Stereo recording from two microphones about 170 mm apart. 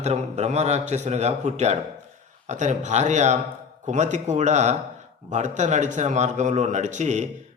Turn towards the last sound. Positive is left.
turn(degrees=-45)  # may be behind; listen again after turning